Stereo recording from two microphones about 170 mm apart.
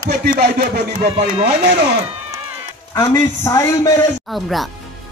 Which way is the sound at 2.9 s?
20° left (ahead or behind).